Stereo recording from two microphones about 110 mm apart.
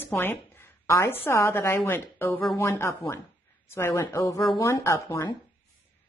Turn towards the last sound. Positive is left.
turn(degrees=25)  # may be behind; listen again after turning